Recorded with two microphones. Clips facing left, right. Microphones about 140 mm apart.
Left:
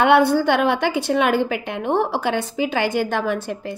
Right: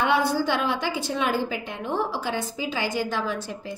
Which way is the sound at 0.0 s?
65° left (ahead or behind).